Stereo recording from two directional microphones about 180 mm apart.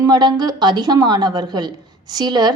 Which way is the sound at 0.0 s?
25° right (ahead or behind).